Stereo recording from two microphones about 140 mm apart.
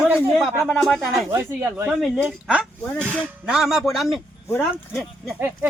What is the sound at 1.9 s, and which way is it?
Speech, centre (ahead or behind).